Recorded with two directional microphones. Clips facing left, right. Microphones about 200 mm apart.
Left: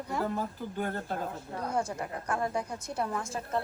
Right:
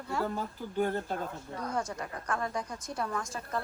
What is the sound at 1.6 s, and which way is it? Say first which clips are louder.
Speech: left 2 dB; 30° left (ahead or behind).